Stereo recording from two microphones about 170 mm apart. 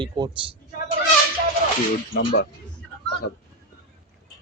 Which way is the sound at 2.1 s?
75° left (ahead or behind).